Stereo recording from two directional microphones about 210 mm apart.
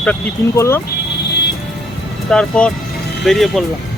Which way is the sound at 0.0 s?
10° left (ahead or behind).